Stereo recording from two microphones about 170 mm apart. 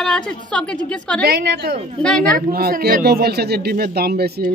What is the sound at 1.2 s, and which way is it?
Speech, 70° right (ahead or behind).